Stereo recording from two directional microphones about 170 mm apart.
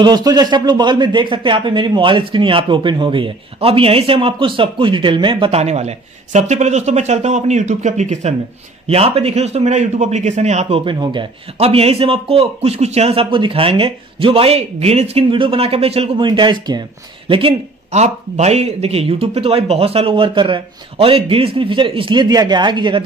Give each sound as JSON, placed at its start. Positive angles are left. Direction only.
{"t": 0.0, "sound": "speech", "side_deg": -25}